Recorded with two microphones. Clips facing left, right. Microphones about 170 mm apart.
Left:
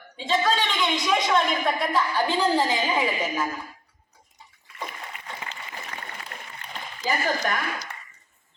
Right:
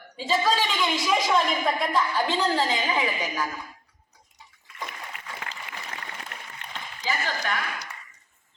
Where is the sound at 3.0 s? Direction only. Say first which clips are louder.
Left 2 dB; 20° left (ahead or behind).